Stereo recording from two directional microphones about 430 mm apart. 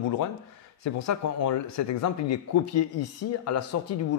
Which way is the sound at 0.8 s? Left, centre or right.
Left.